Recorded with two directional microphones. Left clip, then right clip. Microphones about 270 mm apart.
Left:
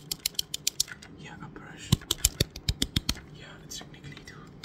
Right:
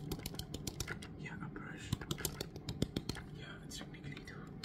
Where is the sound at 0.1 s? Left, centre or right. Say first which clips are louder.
Left 15 dB; left.